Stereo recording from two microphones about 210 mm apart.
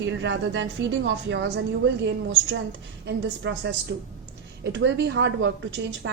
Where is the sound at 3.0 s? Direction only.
55° right (ahead or behind).